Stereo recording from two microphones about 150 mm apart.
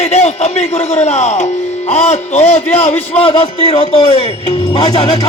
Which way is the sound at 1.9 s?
45° left (ahead or behind).